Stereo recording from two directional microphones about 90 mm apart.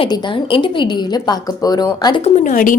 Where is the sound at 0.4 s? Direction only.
75° left (ahead or behind); by 2.2 s 50° left (ahead or behind).